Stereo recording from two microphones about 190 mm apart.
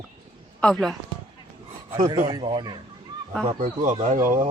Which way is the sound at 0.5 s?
5° left (ahead or behind).